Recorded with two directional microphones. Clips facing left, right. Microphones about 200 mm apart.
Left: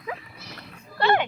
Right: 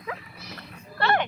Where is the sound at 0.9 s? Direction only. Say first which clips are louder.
Left 3 dB; 15° left (ahead or behind).